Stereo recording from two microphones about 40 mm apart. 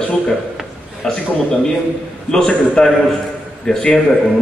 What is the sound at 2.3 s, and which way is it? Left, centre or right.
A man's voice, centre.